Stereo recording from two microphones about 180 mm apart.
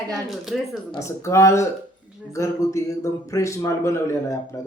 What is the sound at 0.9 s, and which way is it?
A man's voice, 15° left (ahead or behind).